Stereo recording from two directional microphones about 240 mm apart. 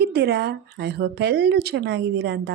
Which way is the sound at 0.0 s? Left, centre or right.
Right.